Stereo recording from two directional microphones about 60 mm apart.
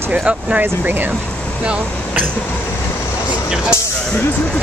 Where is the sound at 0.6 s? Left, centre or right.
Right.